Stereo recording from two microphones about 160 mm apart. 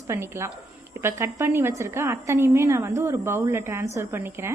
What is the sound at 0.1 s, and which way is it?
A woman's voice, 15° right (ahead or behind).